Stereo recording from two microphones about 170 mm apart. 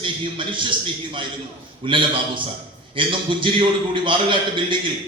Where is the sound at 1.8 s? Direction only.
30° right (ahead or behind).